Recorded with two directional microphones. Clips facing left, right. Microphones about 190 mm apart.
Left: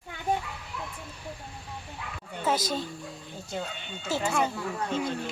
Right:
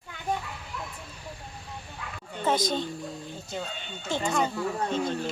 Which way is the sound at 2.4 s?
5° left (ahead or behind).